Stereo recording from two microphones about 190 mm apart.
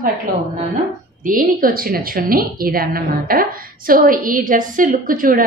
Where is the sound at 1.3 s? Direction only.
50° right (ahead or behind).